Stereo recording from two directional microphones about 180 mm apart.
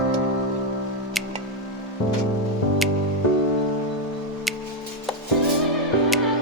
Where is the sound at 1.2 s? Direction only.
Centre (ahead or behind).